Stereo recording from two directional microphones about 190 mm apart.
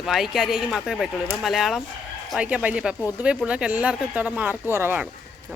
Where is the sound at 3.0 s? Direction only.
15° left (ahead or behind).